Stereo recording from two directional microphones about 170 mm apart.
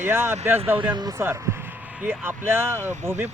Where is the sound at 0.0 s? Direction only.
15° right (ahead or behind).